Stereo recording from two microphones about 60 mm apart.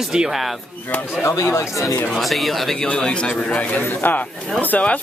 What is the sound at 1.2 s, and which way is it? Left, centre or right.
Speech, left.